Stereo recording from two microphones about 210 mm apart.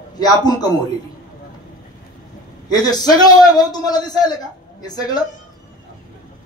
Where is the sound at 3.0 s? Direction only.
20° left (ahead or behind).